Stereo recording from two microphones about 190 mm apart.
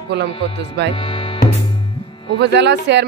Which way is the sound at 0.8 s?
65° right (ahead or behind).